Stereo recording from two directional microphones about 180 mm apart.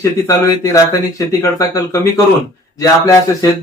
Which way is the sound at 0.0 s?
15° left (ahead or behind).